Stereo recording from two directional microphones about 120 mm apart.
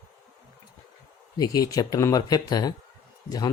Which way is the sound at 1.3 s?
30° left (ahead or behind).